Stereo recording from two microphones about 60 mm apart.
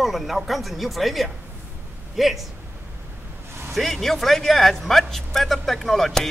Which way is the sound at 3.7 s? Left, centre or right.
Centre.